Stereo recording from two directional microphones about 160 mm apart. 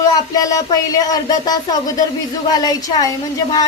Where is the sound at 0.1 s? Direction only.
25° left (ahead or behind).